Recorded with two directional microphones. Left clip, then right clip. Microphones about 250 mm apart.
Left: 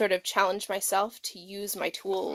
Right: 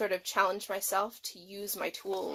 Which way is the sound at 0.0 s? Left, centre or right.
Left.